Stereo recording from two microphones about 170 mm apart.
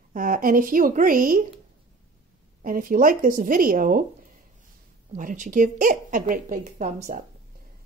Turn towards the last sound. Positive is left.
turn(degrees=-45)  # may be behind; listen again after turning